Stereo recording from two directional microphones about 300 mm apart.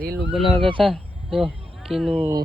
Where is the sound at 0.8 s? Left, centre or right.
Centre.